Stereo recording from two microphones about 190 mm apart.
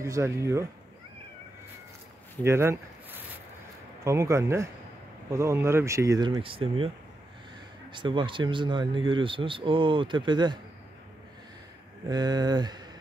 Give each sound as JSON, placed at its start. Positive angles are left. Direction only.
{"t": 0.0, "sound": "speech", "side_deg": -15}
{"t": 2.4, "sound": "a sound", "side_deg": -15}
{"t": 4.0, "sound": "speech", "side_deg": -15}
{"t": 7.9, "sound": "speech", "side_deg": -25}
{"t": 12.1, "sound": "speech", "side_deg": -20}